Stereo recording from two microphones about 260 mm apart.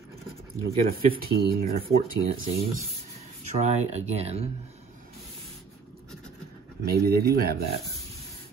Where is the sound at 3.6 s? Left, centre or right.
Right.